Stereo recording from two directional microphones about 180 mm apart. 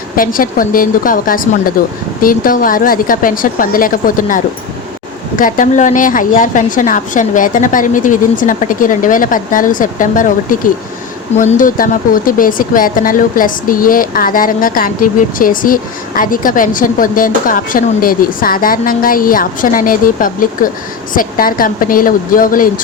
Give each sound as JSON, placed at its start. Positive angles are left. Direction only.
{"t": 0.2, "sound": "a woman's voice", "side_deg": 50}